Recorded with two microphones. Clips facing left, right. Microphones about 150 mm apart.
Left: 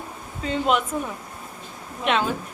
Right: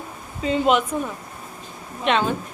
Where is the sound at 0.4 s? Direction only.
5° right (ahead or behind).